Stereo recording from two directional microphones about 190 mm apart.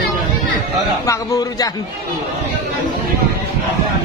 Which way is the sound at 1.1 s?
20° left (ahead or behind).